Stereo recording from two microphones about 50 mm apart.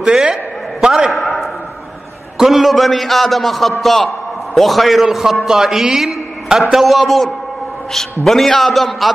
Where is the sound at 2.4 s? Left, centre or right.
Centre.